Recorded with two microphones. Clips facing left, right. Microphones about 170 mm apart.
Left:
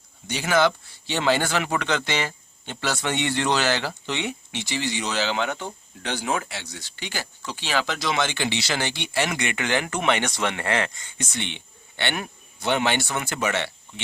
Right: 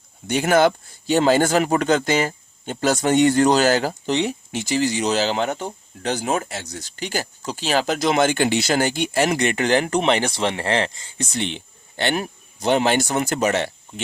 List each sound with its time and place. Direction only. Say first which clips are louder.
0.3 s speech: right 5 dB; 50° right (ahead or behind)